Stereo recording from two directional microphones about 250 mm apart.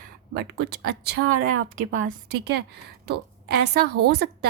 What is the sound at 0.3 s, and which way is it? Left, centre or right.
Speech, right.